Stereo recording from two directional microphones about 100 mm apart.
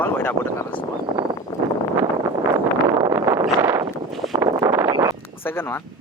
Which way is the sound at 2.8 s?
30° right (ahead or behind).